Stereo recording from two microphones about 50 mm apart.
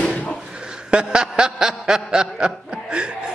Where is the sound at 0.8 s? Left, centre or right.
Centre.